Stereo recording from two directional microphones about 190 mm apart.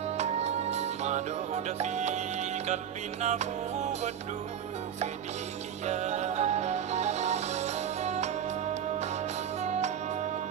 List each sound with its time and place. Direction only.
0.2 s music: 35° right (ahead or behind)
5.9 s music: 35° right (ahead or behind)
9.6 s music: 35° right (ahead or behind)